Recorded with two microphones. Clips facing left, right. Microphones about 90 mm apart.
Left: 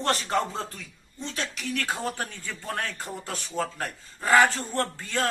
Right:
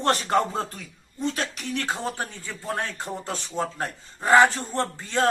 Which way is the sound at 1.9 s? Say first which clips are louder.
Right 1 dB; 20° right (ahead or behind).